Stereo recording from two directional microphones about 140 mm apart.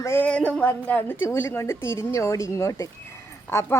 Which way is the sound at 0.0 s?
15° left (ahead or behind).